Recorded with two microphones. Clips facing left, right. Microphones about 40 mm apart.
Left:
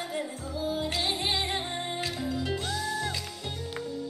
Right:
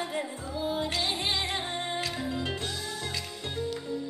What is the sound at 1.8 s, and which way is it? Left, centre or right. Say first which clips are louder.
Music: right 1 dB; right.